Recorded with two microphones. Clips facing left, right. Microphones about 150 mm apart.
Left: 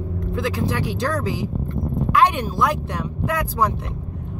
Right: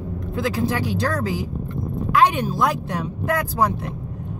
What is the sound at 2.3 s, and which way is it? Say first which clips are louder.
Speech: even; centre (ahead or behind).